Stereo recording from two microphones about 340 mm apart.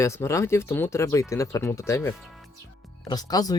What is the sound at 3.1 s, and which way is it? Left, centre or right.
Speech, centre.